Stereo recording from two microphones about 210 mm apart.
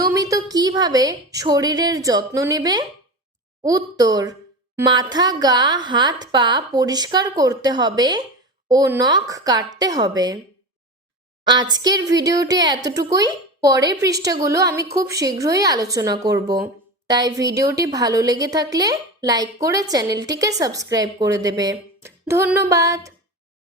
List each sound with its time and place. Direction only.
0.1 s a woman's voice: 15° right (ahead or behind)
11.7 s a woman's voice: 20° right (ahead or behind)